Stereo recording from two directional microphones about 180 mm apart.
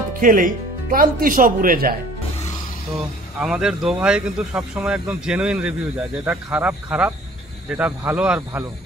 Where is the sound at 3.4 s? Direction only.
5° right (ahead or behind).